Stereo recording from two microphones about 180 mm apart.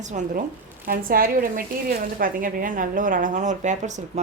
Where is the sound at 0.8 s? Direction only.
55° right (ahead or behind).